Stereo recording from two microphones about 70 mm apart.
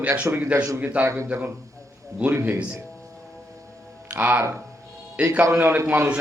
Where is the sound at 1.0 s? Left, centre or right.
Right.